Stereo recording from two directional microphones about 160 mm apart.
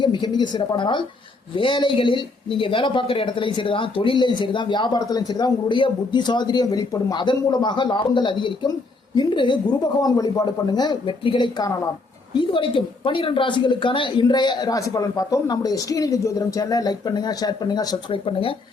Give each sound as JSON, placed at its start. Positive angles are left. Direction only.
{"t": 0.0, "sound": "speech", "side_deg": 30}